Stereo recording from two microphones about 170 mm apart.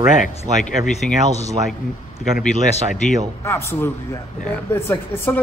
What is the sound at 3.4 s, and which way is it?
A man's voice, 15° left (ahead or behind).